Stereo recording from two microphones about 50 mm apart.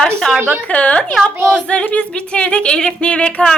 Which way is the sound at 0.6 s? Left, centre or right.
Left.